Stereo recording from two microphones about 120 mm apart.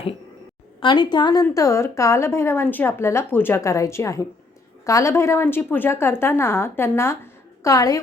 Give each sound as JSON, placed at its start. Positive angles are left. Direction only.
{"t": 0.8, "sound": "a woman's voice", "side_deg": 40}